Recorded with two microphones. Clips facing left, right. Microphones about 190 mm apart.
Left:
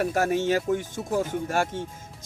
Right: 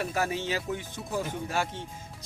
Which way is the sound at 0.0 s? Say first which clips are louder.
Left 6 dB; 50° left (ahead or behind).